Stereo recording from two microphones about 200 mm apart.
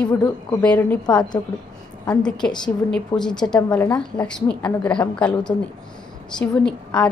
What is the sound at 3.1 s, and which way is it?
Speech, 25° left (ahead or behind).